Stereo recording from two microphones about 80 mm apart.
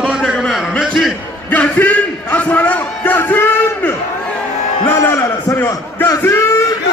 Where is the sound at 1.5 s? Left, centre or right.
Left.